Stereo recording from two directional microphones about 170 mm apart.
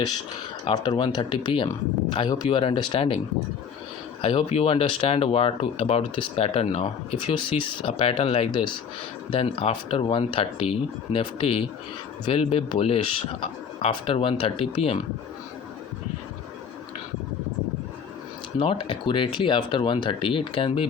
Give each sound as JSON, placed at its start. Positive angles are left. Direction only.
{"t": 0.6, "sound": "speech", "side_deg": 25}
{"t": 4.2, "sound": "speech", "side_deg": 35}
{"t": 18.6, "sound": "speech", "side_deg": 30}